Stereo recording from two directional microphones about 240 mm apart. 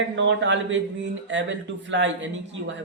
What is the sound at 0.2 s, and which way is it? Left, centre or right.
Speech, right.